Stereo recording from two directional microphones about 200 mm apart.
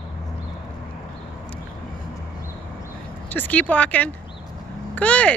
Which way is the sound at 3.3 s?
10° left (ahead or behind).